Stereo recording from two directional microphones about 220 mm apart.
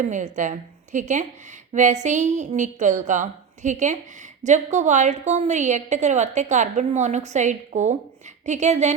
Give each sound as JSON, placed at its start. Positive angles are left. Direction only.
{"t": 0.0, "sound": "a woman's voice", "side_deg": -35}